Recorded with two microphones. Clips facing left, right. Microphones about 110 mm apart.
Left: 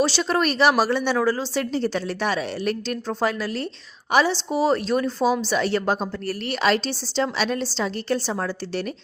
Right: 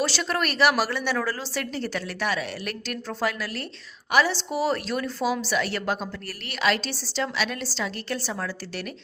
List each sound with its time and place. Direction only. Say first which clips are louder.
0.0 s a woman's voice: left 5 dB; 20° left (ahead or behind)